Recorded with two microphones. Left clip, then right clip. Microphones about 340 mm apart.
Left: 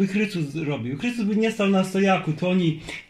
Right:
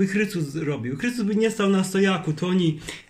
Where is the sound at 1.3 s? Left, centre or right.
Right.